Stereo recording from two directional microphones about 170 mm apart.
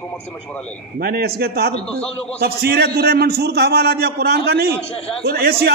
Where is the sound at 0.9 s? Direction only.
65° right (ahead or behind).